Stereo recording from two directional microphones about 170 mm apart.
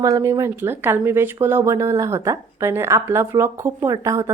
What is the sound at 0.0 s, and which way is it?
Speech, 20° right (ahead or behind).